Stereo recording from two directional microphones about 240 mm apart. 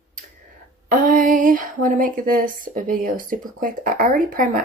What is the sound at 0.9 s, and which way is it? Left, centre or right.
Speech, right.